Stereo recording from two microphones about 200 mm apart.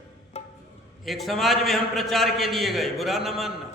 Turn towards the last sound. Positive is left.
turn(degrees=0)  # may be behind; listen again after turning